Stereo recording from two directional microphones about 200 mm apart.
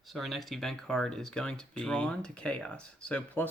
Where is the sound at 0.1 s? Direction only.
Centre (ahead or behind).